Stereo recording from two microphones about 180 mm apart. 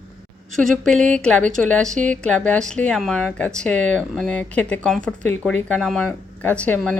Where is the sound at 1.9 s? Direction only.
45° right (ahead or behind).